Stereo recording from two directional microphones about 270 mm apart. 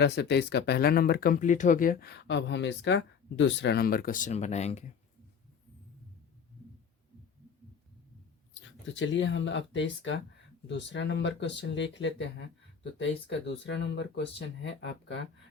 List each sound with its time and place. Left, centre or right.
0.0 s speech: left
8.6 s speech: left